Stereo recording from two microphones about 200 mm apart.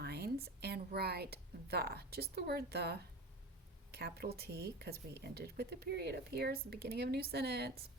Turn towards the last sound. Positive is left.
turn(degrees=-55)  # may be behind; listen again after turning